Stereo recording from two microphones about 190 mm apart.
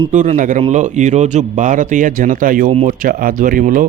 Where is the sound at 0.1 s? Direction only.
40° right (ahead or behind).